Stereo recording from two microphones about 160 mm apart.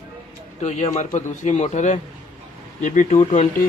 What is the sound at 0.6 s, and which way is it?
A man's voice, 45° left (ahead or behind).